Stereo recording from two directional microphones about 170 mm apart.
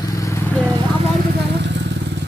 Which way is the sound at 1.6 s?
90° right.